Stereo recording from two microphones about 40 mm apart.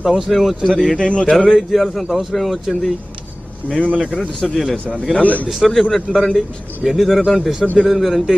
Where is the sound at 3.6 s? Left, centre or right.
Left.